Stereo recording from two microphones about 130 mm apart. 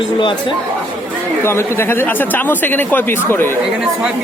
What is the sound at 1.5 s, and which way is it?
Speech, 20° left (ahead or behind).